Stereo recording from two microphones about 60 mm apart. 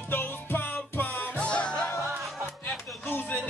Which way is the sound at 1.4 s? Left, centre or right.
Centre.